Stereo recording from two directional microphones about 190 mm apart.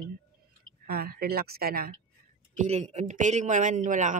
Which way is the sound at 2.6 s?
35° right (ahead or behind).